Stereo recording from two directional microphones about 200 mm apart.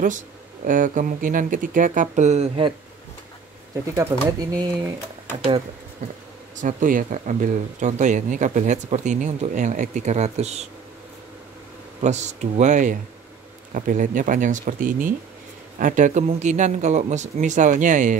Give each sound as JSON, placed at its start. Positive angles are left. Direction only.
{"t": 0.7, "sound": "speech", "side_deg": -40}
{"t": 4.4, "sound": "speech", "side_deg": -20}
{"t": 6.6, "sound": "speech", "side_deg": -40}
{"t": 12.0, "sound": "speech", "side_deg": -35}